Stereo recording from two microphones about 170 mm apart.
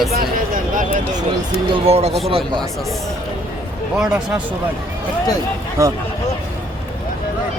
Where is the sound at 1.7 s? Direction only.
35° right (ahead or behind).